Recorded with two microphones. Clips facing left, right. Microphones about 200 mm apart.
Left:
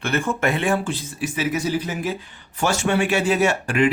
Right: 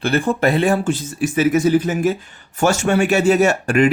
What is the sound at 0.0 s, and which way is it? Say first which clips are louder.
Speech: right 5 dB; 35° right (ahead or behind).